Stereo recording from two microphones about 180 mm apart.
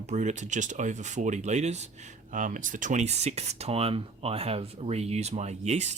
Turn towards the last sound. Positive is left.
turn(degrees=-40)  # may be behind; listen again after turning